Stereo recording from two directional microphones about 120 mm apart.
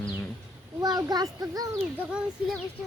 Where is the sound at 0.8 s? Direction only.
35° right (ahead or behind).